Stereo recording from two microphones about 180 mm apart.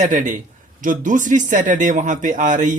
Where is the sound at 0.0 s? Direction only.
45° right (ahead or behind).